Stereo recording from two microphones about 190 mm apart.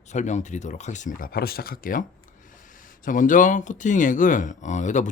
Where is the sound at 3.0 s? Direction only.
45° left (ahead or behind).